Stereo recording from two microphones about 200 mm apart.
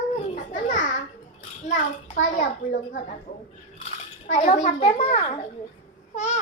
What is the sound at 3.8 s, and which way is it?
A child's voice, 40° left (ahead or behind).